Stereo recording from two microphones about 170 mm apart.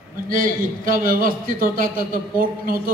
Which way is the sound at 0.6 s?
55° right (ahead or behind).